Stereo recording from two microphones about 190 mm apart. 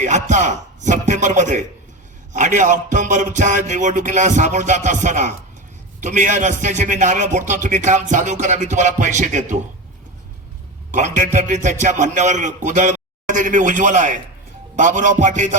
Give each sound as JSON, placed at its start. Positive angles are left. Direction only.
{"t": 0.0, "sound": "a man's voice", "side_deg": -40}
{"t": 10.9, "sound": "a man's voice", "side_deg": -40}